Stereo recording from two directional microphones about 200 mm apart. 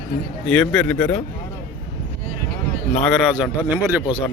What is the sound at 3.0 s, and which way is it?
Speech, centre (ahead or behind).